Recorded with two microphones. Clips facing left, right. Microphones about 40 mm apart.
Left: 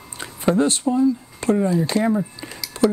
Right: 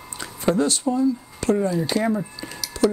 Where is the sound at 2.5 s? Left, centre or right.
Left.